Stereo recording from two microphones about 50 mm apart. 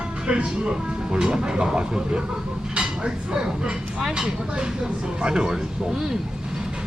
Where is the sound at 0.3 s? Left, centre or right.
Centre.